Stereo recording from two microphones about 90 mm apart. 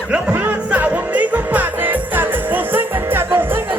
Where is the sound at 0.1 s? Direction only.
15° right (ahead or behind).